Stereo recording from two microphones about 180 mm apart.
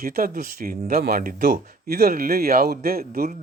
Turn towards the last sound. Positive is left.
turn(degrees=-55)  # may be behind; listen again after turning